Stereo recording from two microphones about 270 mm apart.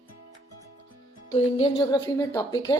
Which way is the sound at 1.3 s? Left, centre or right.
Left.